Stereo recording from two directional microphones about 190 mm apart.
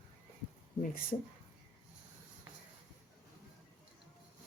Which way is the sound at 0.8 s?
50° left (ahead or behind).